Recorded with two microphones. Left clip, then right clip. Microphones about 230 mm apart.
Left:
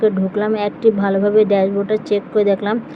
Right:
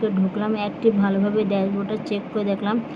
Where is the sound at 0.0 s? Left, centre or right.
Left.